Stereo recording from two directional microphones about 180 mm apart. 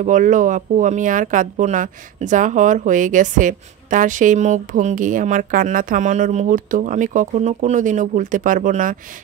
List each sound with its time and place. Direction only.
0.0 s speech: 45° right (ahead or behind)